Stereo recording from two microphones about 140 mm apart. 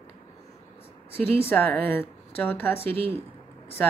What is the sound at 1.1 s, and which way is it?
A woman's voice, 15° left (ahead or behind).